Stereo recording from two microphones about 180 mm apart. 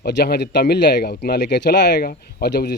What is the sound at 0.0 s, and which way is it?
Speech, 65° left (ahead or behind).